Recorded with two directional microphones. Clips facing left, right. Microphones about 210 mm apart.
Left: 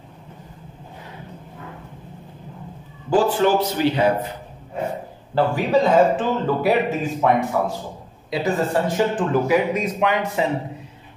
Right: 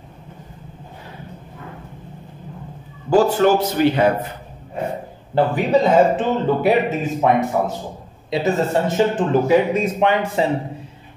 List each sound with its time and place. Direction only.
3.1 s a man's voice: 45° right (ahead or behind)
5.3 s a man's voice: 20° right (ahead or behind)